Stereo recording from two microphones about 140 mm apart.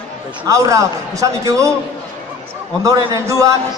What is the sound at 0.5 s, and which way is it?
A man's voice, 25° right (ahead or behind).